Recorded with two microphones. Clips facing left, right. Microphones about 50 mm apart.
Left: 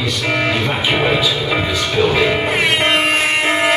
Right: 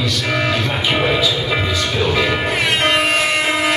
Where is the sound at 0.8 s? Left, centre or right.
Centre.